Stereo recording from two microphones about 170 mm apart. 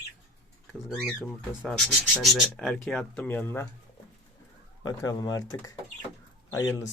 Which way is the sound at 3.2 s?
15° left (ahead or behind).